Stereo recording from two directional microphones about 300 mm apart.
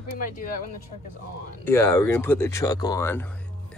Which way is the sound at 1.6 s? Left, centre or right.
Centre.